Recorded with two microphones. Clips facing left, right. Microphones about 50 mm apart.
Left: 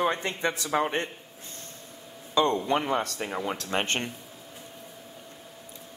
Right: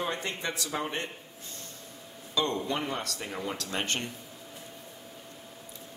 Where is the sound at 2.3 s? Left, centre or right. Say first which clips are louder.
Left 6 dB; left.